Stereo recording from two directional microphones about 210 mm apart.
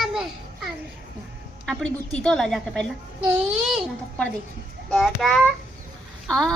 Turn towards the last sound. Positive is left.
turn(degrees=5)  # may be behind; listen again after turning